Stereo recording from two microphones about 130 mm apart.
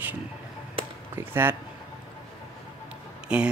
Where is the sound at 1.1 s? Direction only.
15° right (ahead or behind).